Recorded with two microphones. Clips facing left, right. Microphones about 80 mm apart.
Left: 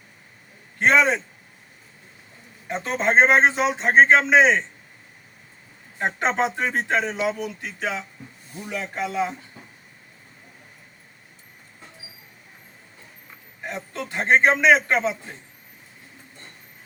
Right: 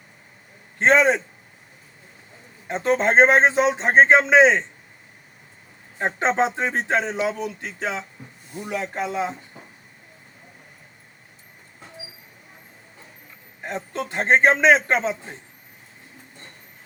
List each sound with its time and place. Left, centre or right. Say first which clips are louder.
0.8 s speech: right 2 dB; right
2.6 s speech: right 3 dB; right
6.0 s speech: right 2 dB; right
13.7 s a man's voice: right 3 dB; right